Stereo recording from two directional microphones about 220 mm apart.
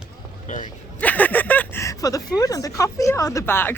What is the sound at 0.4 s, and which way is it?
Speech, 35° left (ahead or behind).